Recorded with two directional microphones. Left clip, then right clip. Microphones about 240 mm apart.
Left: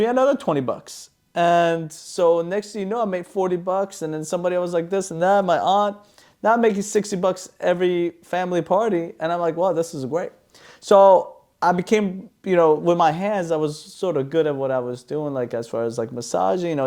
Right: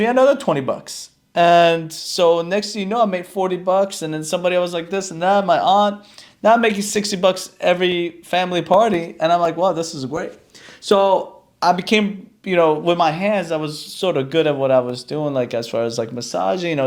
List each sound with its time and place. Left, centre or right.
0.0 s speech: left
4.7 s speech: left
6.4 s speech: left
7.8 s speech: left
11.6 s speech: left
13.0 s speech: left
13.8 s speech: left